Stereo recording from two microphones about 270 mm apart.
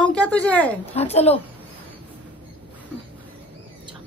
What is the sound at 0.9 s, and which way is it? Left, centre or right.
Speech, left.